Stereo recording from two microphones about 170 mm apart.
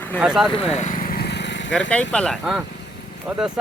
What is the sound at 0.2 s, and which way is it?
Speech, 5° right (ahead or behind).